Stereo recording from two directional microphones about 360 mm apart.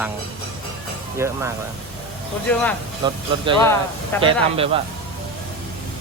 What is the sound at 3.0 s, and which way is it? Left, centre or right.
Speech, centre.